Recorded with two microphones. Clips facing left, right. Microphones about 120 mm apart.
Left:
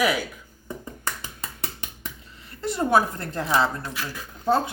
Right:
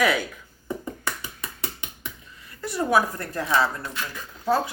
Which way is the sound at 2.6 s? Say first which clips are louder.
Left 1 dB; 25° left (ahead or behind).